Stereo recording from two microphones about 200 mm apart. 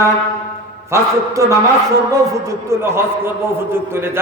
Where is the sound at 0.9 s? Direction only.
15° right (ahead or behind).